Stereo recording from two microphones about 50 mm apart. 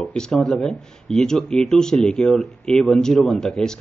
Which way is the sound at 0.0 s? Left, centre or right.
Centre.